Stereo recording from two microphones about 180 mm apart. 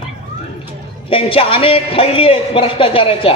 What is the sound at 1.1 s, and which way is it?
A man's voice, 30° left (ahead or behind).